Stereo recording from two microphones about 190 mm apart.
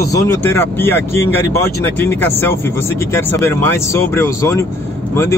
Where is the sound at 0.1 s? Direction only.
15° left (ahead or behind).